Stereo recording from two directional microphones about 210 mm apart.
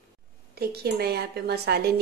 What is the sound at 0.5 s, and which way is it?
Speech, 50° right (ahead or behind).